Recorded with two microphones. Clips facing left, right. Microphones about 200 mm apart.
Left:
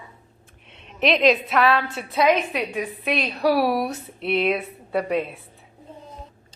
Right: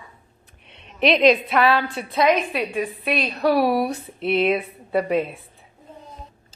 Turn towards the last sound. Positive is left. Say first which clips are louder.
# right 2 dB
turn(degrees=0)  # may be behind; listen again after turning